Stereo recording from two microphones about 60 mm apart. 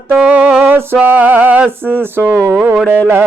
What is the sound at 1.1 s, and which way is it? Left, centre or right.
Carnatic music, right.